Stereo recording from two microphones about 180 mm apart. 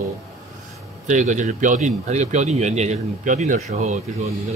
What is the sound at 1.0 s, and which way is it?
A man's voice, 45° right (ahead or behind).